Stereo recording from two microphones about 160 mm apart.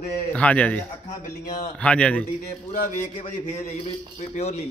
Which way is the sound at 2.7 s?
55° left (ahead or behind).